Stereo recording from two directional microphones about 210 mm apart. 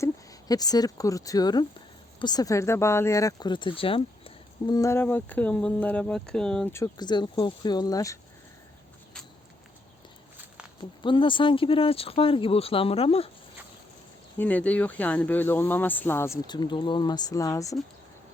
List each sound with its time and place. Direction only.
0.0 s speech: 15° left (ahead or behind)
10.8 s speech: 25° left (ahead or behind)
14.3 s speech: 5° left (ahead or behind)